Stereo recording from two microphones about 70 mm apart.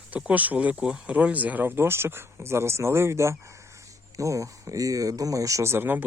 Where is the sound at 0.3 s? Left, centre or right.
Right.